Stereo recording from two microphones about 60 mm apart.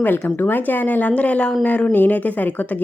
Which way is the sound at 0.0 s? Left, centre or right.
Left.